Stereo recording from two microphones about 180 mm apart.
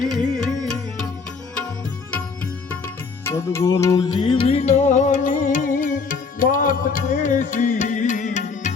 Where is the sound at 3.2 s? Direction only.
15° left (ahead or behind).